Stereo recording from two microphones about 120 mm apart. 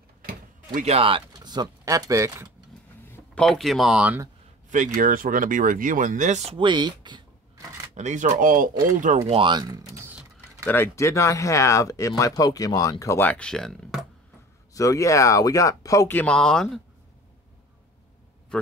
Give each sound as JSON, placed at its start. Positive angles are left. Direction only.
{"t": 0.7, "sound": "speech", "side_deg": -55}
{"t": 1.3, "sound": "speech", "side_deg": -35}
{"t": 3.3, "sound": "speech", "side_deg": 5}
{"t": 4.6, "sound": "speech", "side_deg": -90}
{"t": 6.6, "sound": "speech", "side_deg": -40}
{"t": 7.9, "sound": "speech", "side_deg": -80}
{"t": 9.3, "sound": "speech", "side_deg": -40}
{"t": 9.9, "sound": "a sound", "side_deg": -20}
{"t": 10.7, "sound": "speech", "side_deg": 20}
{"t": 13.3, "sound": "speech", "side_deg": 5}
{"t": 14.7, "sound": "speech", "side_deg": 30}
{"t": 16.1, "sound": "speech", "side_deg": 10}